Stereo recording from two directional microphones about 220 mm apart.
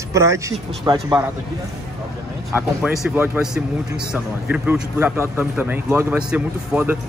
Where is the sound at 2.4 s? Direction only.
5° right (ahead or behind).